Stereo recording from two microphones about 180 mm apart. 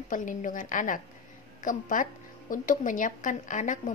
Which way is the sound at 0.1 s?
45° left (ahead or behind).